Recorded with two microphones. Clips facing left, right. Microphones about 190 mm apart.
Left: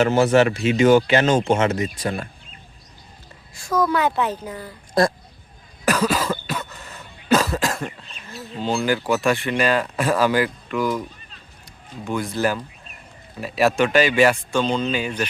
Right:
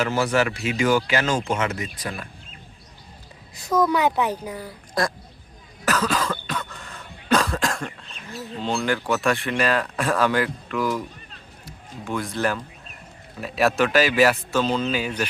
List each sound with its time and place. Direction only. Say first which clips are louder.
0.0 s speech: left 6 dB; 25° left (ahead or behind)
3.5 s a sound: right 1 dB; 20° right (ahead or behind)
3.8 s speech: even; 15° right (ahead or behind)
5.0 s speech: left 6 dB; 25° left (ahead or behind)
5.8 s cough: left 3 dB; 10° left (ahead or behind)
9.0 s speech: left 2 dB; centre (ahead or behind)